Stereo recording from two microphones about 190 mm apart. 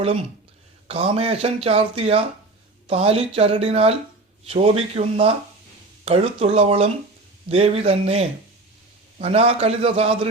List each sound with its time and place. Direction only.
0.9 s speech: 30° right (ahead or behind)